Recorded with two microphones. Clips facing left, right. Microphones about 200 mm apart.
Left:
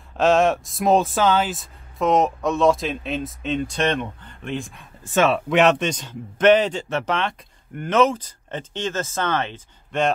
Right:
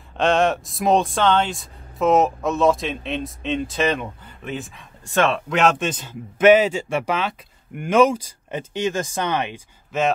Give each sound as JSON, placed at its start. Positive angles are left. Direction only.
{"t": 0.2, "sound": "speech", "side_deg": 0}
{"t": 9.9, "sound": "speech", "side_deg": -5}